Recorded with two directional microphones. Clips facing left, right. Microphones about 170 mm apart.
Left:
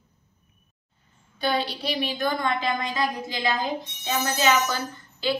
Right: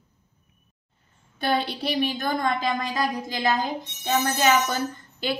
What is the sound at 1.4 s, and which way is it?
A woman's voice, 55° right (ahead or behind).